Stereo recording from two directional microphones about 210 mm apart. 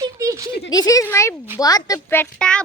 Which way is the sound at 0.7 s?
15° left (ahead or behind).